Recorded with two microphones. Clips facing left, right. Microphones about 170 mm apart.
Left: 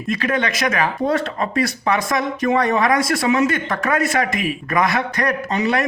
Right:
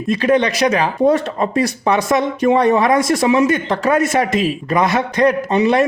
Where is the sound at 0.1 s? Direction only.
20° right (ahead or behind).